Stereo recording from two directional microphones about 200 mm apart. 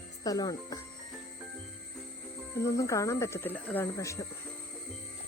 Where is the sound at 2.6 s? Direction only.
15° left (ahead or behind).